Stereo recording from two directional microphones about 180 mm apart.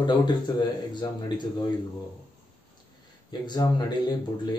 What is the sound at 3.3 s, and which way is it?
Speech, 25° left (ahead or behind).